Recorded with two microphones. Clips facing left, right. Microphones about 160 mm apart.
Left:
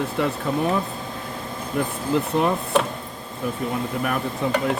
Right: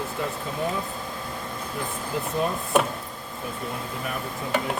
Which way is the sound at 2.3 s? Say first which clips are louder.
Left 4 dB; 75° left (ahead or behind).